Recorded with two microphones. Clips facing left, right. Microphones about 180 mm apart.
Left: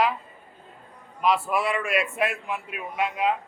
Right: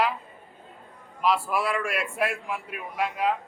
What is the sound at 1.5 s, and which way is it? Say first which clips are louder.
A man's voice: left 1 dB; centre (ahead or behind).